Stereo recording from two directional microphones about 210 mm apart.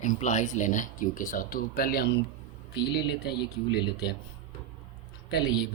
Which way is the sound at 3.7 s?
50° left (ahead or behind).